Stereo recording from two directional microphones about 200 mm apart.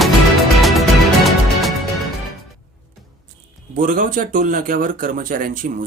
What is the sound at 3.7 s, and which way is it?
Speech, 40° right (ahead or behind).